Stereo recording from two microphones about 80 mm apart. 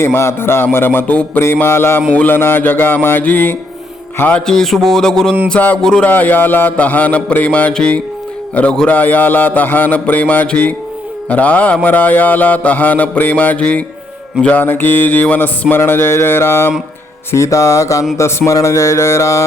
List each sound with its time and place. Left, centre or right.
0.0 s mantra: left
1.4 s mantra: left
4.4 s a sound: centre
5.5 s a man's voice: centre
6.1 s mantra: left
8.5 s a man's voice: centre
9.0 s mantra: left